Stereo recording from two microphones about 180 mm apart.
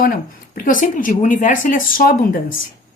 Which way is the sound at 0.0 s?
50° left (ahead or behind).